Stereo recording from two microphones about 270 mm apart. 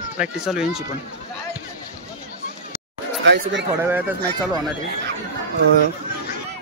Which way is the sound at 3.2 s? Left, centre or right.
Right.